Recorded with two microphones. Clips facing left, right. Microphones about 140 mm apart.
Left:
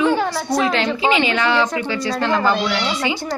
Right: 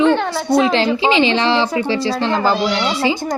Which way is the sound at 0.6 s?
30° right (ahead or behind).